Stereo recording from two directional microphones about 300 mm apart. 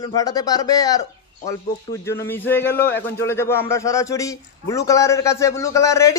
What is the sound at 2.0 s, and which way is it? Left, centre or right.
A man's voice, centre.